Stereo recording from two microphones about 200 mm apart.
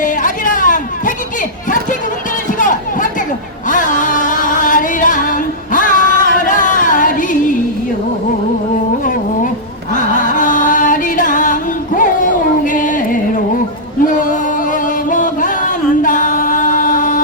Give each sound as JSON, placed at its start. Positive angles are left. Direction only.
{"t": 0.0, "sound": "chatter", "side_deg": 40}
{"t": 3.7, "sound": "music", "side_deg": 40}
{"t": 9.9, "sound": "music", "side_deg": 40}
{"t": 14.0, "sound": "a sound", "side_deg": 40}